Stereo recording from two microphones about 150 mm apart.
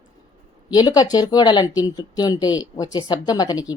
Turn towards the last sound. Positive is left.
turn(degrees=25)  # may be behind; listen again after turning